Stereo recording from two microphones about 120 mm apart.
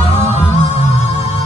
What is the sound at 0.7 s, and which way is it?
Music, 65° left (ahead or behind).